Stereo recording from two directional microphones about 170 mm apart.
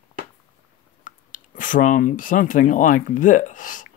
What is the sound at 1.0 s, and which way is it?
Speech, 50° left (ahead or behind).